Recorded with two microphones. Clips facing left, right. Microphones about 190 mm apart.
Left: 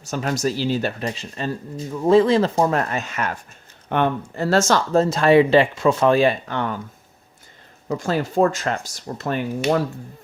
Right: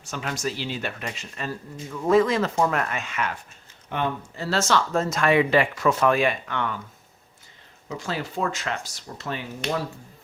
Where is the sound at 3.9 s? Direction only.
55° left (ahead or behind); by 6.8 s 35° left (ahead or behind).